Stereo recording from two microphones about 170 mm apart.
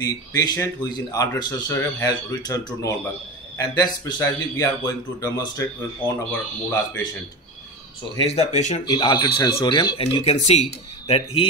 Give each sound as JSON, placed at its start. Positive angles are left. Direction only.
{"t": 0.0, "sound": "speech", "side_deg": 20}
{"t": 8.2, "sound": "speech", "side_deg": 40}
{"t": 8.8, "sound": "speech", "side_deg": 25}